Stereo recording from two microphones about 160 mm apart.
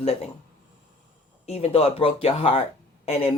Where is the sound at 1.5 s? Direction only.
40° left (ahead or behind).